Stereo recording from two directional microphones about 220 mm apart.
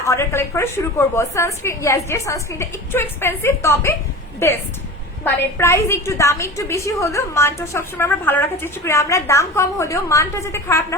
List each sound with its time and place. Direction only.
0.0 s a woman's voice: 15° left (ahead or behind)